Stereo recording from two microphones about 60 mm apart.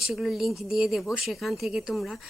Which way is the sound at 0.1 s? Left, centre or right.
Centre.